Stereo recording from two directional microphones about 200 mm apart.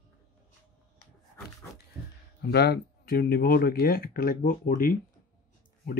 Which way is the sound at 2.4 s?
55° left (ahead or behind).